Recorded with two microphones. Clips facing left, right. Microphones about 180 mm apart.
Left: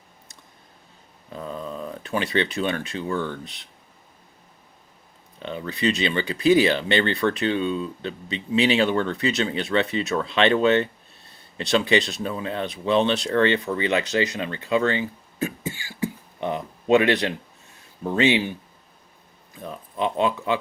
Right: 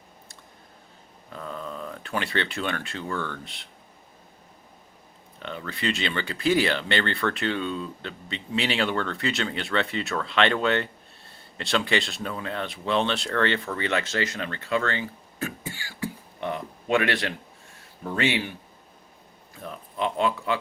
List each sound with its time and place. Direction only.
1.3 s speech: 20° left (ahead or behind)
5.4 s speech: 15° left (ahead or behind)
19.5 s speech: 20° left (ahead or behind)